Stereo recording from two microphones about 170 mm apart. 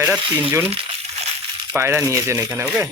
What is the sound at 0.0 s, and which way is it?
Speech, 10° right (ahead or behind).